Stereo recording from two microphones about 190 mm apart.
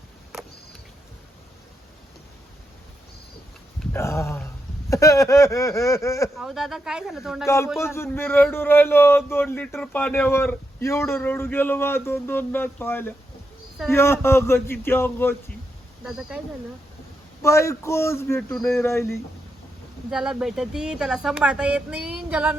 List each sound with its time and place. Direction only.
3.9 s speech: 15° left (ahead or behind)
6.3 s speech: centre (ahead or behind)
7.4 s speech: 15° left (ahead or behind)
16.0 s speech: centre (ahead or behind)
17.4 s speech: 15° left (ahead or behind)
18.5 s speech: centre (ahead or behind)
18.8 s speech: 15° left (ahead or behind)
20.1 s speech: 5° right (ahead or behind)